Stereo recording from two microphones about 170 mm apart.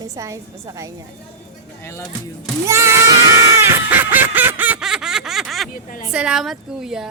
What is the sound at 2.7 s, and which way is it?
Speech, 15° right (ahead or behind).